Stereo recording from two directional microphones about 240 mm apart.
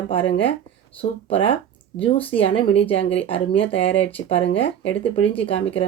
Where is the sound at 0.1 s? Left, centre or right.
Left.